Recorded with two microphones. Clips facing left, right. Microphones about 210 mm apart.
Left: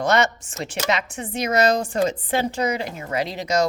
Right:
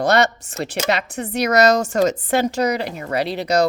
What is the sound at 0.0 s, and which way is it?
Speech, 35° right (ahead or behind).